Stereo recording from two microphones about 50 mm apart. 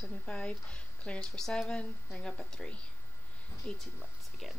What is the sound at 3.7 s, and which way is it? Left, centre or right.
Speech, centre.